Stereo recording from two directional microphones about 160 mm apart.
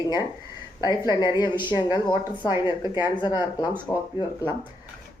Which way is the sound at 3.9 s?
5° left (ahead or behind).